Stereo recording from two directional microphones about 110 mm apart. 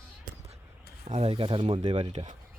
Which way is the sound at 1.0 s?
75° right (ahead or behind).